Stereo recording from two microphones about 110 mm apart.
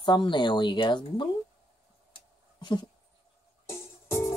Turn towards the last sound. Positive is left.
turn(degrees=30)  # may be behind; listen again after turning